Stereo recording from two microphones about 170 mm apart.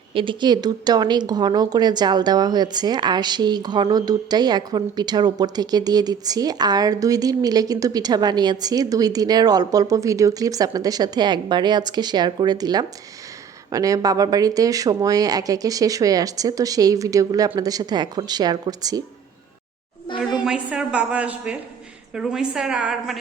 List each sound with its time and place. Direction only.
0.1 s speech: 30° right (ahead or behind)
20.4 s a woman's voice: 5° right (ahead or behind)